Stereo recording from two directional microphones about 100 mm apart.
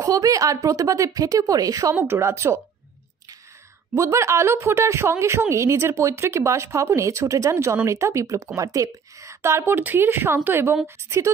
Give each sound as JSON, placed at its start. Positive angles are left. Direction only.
{"t": 0.0, "sound": "a woman's voice", "side_deg": -35}
{"t": 2.0, "sound": "speech", "side_deg": -25}
{"t": 3.9, "sound": "speech", "side_deg": -30}